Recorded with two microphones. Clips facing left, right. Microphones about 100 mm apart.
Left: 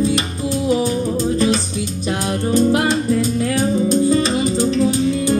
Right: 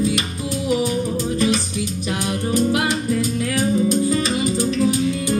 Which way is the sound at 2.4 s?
35° left (ahead or behind).